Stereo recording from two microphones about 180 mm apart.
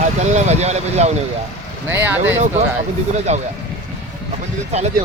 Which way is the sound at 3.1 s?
40° right (ahead or behind).